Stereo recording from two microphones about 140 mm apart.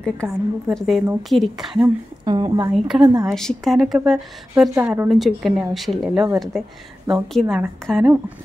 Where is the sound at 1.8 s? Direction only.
30° right (ahead or behind).